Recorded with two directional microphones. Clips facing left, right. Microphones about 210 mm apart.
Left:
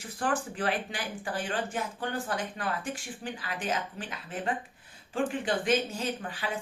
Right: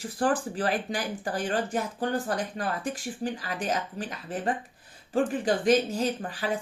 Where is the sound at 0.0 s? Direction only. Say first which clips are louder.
Right 5 dB; 35° right (ahead or behind).